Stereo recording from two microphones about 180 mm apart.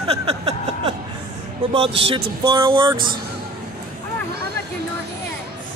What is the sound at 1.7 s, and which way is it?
A man's voice, 30° right (ahead or behind).